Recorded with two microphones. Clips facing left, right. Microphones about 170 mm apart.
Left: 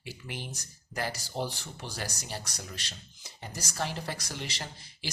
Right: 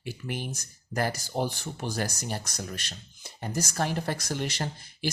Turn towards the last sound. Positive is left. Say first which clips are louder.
# right 8 dB
turn(degrees=-55)  # may be behind; listen again after turning